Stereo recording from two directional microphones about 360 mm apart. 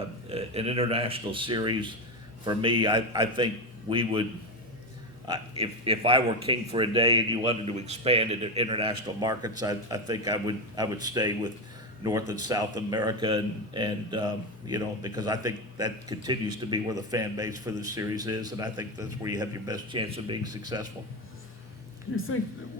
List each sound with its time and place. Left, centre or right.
0.3 s speech: centre
5.3 s speech: centre